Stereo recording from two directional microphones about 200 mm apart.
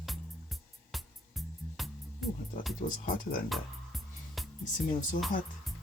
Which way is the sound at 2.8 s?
45° left (ahead or behind).